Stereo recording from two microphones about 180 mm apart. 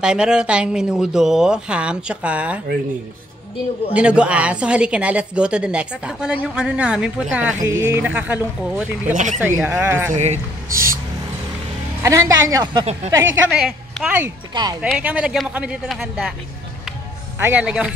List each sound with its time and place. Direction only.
0.0 s a woman's voice: 5° right (ahead or behind)
3.9 s a woman's voice: 5° right (ahead or behind)
9.1 s speech: 45° right (ahead or behind)
9.4 s speech: 10° right (ahead or behind)
10.1 s speech: 40° right (ahead or behind)
12.0 s speech: 15° right (ahead or behind)
13.5 s a woman's voice: centre (ahead or behind)
14.5 s speech: 25° right (ahead or behind)
14.8 s a woman's voice: 5° right (ahead or behind)
17.4 s speech: 10° right (ahead or behind)